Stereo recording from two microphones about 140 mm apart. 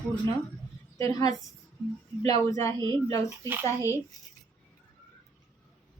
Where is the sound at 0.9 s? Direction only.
25° left (ahead or behind).